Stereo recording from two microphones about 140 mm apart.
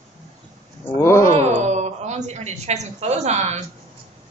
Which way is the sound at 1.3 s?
55° right (ahead or behind).